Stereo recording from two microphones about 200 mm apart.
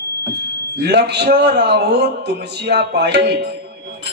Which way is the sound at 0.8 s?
55° right (ahead or behind).